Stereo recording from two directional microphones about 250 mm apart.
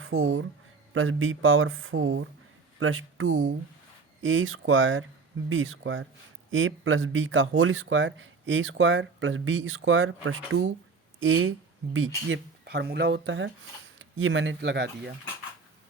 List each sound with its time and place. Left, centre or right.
0.0 s a man's voice: right